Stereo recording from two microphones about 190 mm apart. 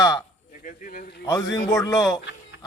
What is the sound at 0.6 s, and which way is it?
Speech, 50° left (ahead or behind).